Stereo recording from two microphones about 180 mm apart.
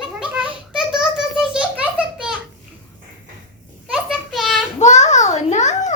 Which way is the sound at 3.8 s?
5° right (ahead or behind).